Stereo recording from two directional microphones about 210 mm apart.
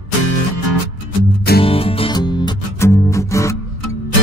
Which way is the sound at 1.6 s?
25° left (ahead or behind).